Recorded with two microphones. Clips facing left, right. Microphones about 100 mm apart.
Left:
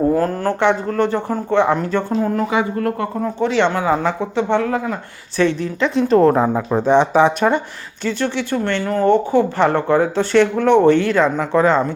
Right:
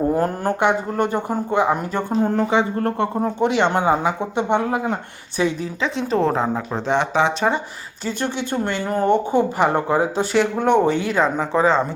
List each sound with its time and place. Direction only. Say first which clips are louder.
0.2 s speech: left 2 dB; 15° right (ahead or behind)
2.2 s speech: even; 30° right (ahead or behind)
3.4 s speech: left 1 dB; 15° right (ahead or behind)
5.4 s speech: left 4 dB; 10° right (ahead or behind); by 7.3 s 15° left (ahead or behind)
8.0 s speech: left 4 dB; 15° right (ahead or behind); by 11.9 s centre (ahead or behind)